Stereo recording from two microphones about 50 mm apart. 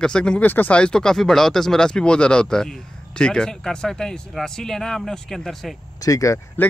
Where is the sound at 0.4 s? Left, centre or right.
Left.